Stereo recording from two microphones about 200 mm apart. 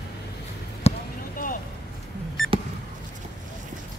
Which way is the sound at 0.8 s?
30° left (ahead or behind).